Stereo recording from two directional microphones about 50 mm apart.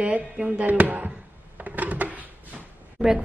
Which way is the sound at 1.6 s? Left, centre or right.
Right.